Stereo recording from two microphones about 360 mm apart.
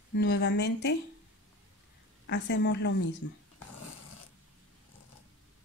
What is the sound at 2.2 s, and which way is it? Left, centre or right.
Speech, left.